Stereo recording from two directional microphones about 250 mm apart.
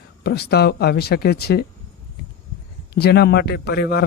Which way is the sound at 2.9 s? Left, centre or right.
Left.